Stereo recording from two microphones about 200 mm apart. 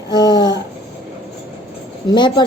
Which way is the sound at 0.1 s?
20° left (ahead or behind).